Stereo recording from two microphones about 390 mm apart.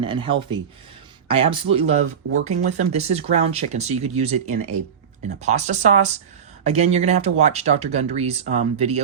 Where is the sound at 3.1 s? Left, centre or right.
Centre.